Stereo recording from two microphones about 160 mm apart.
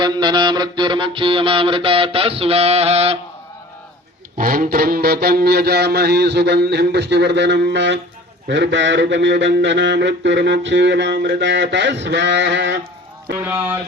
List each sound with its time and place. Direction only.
0.0 s mantra: 25° right (ahead or behind)
4.4 s a sound: 65° right (ahead or behind); by 12.8 s 90° right
13.3 s speech: 15° right (ahead or behind)